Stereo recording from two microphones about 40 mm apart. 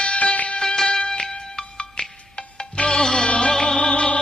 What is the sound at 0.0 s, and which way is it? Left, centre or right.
Music, left.